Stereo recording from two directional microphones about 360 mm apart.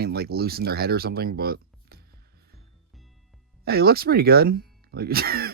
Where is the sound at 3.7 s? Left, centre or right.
Right.